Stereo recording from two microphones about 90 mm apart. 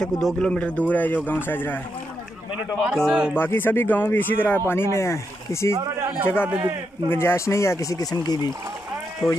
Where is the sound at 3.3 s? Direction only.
25° left (ahead or behind).